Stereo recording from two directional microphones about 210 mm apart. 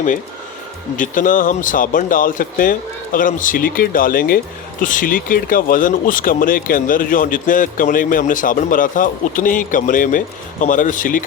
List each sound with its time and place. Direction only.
0.9 s speech: 40° left (ahead or behind)